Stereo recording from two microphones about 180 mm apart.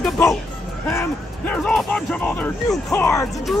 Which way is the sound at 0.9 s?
10° left (ahead or behind).